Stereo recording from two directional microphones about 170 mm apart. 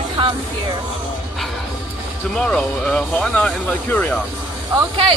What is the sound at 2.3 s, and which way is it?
Speech, centre (ahead or behind).